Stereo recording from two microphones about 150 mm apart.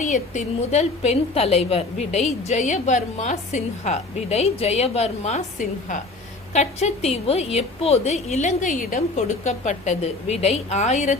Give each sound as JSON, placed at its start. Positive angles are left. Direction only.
{"t": 0.0, "sound": "a woman's voice", "side_deg": 50}